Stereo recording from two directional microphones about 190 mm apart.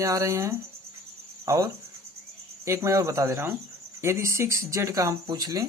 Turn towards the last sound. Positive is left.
turn(degrees=-20)  # may be behind; listen again after turning